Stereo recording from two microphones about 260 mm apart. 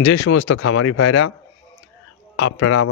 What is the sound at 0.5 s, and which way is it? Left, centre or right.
Speech, left.